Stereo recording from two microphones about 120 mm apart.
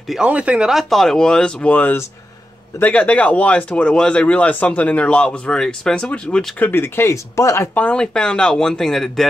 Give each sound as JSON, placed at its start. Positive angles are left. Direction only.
{"t": 0.1, "sound": "speech", "side_deg": -10}
{"t": 6.7, "sound": "speech", "side_deg": 20}
{"t": 7.7, "sound": "speech", "side_deg": 10}